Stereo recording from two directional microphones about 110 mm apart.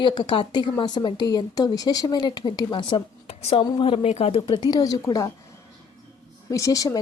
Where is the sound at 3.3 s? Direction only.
70° left (ahead or behind).